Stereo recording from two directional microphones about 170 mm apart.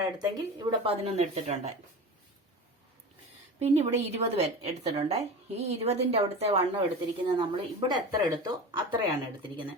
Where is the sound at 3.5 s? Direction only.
40° right (ahead or behind).